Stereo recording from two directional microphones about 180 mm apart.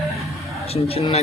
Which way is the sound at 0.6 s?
35° left (ahead or behind).